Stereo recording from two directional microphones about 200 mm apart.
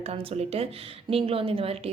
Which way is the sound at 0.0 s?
30° right (ahead or behind).